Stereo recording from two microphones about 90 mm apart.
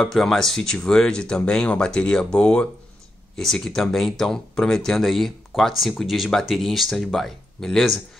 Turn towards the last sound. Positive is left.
turn(degrees=0)  # may be behind; listen again after turning